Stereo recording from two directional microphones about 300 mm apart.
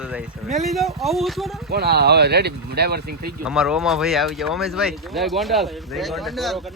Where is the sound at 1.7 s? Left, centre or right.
Right.